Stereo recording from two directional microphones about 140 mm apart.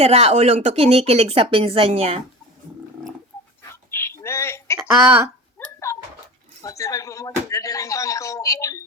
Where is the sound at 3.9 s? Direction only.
20° left (ahead or behind).